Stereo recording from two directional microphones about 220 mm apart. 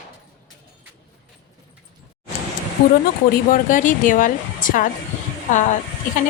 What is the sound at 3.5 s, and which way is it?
A woman's voice, 35° left (ahead or behind).